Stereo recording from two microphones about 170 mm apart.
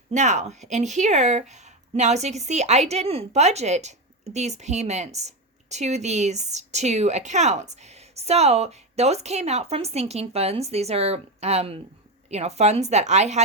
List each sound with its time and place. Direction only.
0.1 s speech: 45° right (ahead or behind)